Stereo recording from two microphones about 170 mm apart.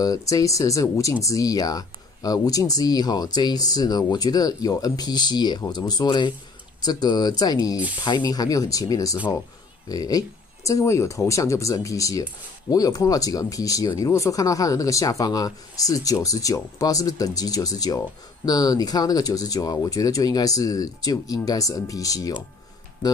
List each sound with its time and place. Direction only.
0.0 s speech: 20° left (ahead or behind)